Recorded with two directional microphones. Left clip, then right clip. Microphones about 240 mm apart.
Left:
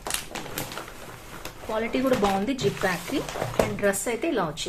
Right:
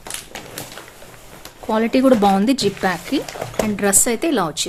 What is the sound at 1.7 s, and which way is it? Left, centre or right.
Speech, right.